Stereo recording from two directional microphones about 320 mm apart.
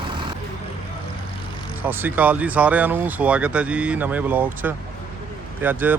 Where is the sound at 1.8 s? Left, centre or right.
Centre.